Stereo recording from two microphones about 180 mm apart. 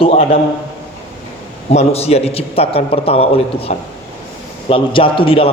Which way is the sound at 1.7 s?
35° left (ahead or behind).